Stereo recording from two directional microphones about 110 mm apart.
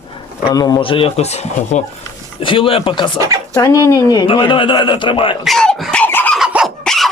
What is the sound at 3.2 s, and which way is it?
Speech, 30° right (ahead or behind).